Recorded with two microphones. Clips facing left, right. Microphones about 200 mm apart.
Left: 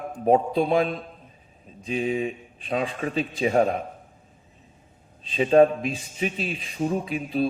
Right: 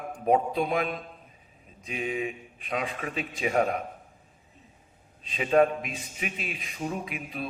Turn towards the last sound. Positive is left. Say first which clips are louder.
# left 9 dB
turn(degrees=30)  # may be behind; listen again after turning